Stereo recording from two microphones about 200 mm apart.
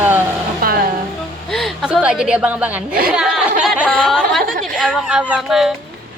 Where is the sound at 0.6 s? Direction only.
50° right (ahead or behind).